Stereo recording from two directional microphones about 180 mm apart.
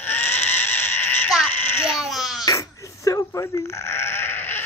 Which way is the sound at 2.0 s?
Centre (ahead or behind).